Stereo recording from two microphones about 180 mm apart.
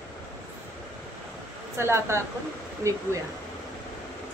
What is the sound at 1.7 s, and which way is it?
Speech, 15° right (ahead or behind).